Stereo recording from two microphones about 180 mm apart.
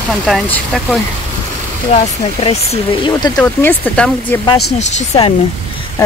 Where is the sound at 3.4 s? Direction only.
10° left (ahead or behind).